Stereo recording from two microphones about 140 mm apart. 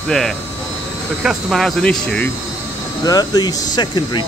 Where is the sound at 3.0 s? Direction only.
25° left (ahead or behind).